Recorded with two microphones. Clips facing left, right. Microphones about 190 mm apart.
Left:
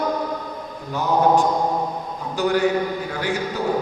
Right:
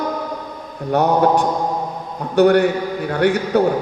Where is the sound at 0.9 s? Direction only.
65° right (ahead or behind).